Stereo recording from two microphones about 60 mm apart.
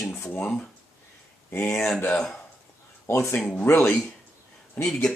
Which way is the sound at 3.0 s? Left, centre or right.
Left.